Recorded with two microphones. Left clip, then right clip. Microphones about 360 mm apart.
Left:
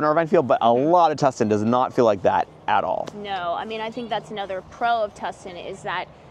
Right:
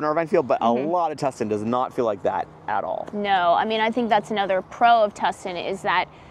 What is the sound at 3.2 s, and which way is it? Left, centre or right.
A woman's voice, right.